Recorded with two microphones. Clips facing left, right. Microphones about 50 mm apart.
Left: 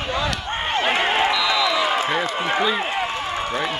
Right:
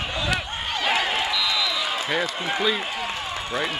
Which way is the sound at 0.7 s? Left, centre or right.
Left.